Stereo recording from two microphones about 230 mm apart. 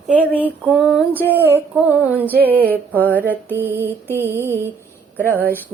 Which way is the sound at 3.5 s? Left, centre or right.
Centre.